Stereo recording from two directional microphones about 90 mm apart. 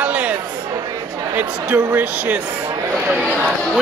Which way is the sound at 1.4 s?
20° right (ahead or behind).